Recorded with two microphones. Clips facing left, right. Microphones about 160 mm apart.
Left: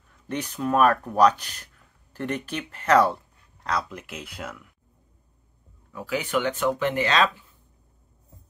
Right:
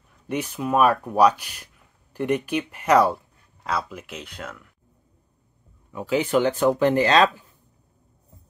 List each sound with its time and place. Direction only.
0.3 s speech: 10° right (ahead or behind)
5.9 s speech: 25° right (ahead or behind)